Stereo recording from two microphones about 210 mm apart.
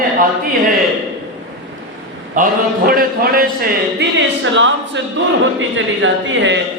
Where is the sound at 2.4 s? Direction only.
40° right (ahead or behind).